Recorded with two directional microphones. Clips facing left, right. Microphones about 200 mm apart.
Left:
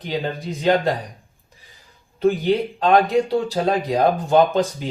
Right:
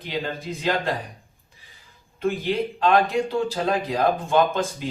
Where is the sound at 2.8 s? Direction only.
35° left (ahead or behind).